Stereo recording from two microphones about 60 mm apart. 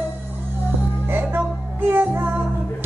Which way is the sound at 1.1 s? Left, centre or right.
Right.